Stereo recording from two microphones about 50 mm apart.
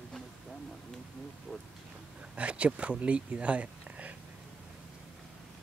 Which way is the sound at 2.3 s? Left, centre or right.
Right.